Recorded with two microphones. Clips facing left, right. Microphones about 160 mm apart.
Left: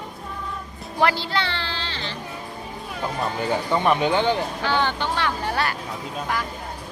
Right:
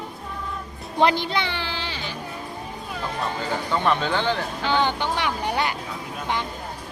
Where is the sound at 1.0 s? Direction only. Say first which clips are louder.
Right 1 dB; 20° right (ahead or behind).